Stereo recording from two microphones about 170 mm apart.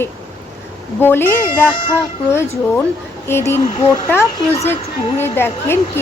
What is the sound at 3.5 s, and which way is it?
Speech, 35° left (ahead or behind).